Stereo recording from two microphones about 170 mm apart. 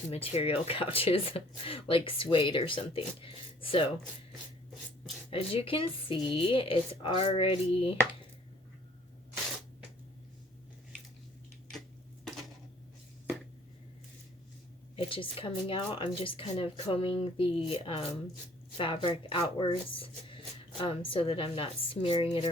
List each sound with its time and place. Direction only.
0.1 s speech: 35° left (ahead or behind)
5.3 s speech: 35° left (ahead or behind)
14.9 s speech: 30° left (ahead or behind)